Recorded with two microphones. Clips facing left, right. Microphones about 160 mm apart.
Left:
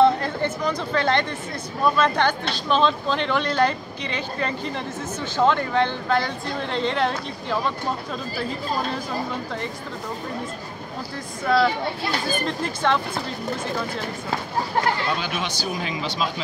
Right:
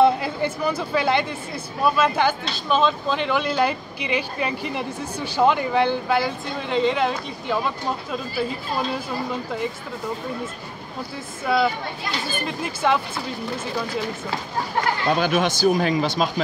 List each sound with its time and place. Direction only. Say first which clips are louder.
0.0 s a sound: even; 10° right (ahead or behind)
2.0 s speech: even; 5° right (ahead or behind)
11.4 s speech: left 1 dB; 5° right (ahead or behind)
15.1 s speech: right 7 dB; 50° right (ahead or behind)